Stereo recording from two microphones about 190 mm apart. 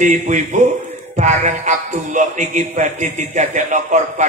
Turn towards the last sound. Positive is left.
turn(degrees=-40)  # may be behind; listen again after turning